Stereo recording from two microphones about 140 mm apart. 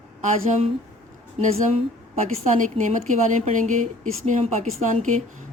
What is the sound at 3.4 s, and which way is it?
Speech, 60° right (ahead or behind).